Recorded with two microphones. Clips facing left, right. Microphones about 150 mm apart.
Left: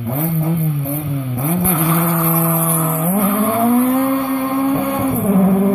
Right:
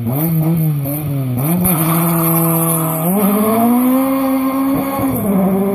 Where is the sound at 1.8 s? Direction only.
10° right (ahead or behind).